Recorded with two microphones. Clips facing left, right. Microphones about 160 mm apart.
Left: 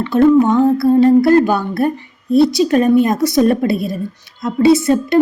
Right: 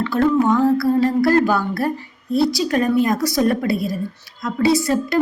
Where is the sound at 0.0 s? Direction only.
20° left (ahead or behind).